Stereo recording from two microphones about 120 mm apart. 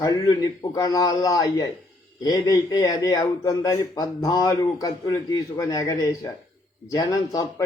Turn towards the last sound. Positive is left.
turn(degrees=25)  # may be behind; listen again after turning